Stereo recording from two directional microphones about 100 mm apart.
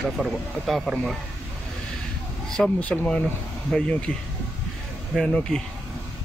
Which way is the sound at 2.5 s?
10° left (ahead or behind).